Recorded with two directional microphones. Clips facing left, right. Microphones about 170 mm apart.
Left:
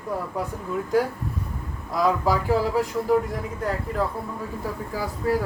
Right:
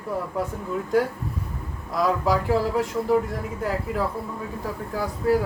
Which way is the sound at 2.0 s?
Centre (ahead or behind).